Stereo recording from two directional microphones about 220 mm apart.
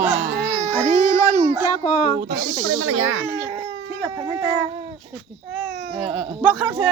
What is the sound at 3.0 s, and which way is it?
Speech, 65° right (ahead or behind).